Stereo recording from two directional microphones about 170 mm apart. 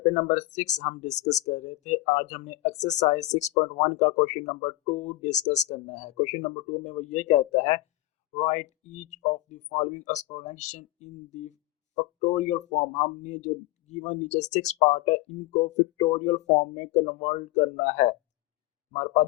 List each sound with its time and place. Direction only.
0.0 s speech: 40° left (ahead or behind)